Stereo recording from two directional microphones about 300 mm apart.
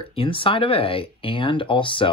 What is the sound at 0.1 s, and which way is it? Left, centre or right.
Speech, centre.